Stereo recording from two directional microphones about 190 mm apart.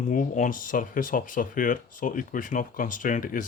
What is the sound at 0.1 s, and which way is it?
Speech, 45° left (ahead or behind).